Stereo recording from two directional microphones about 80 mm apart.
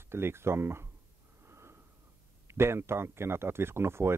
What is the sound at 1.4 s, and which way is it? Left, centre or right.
Snort, right.